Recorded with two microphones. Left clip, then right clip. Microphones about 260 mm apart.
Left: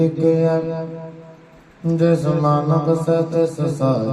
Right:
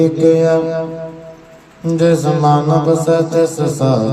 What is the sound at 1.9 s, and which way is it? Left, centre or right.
Mantra, right.